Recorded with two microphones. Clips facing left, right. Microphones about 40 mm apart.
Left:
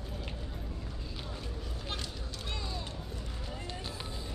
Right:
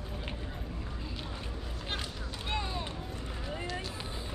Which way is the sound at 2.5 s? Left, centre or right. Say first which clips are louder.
Right 6 dB; right.